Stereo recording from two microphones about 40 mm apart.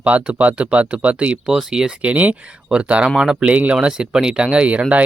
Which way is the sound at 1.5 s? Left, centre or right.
Centre.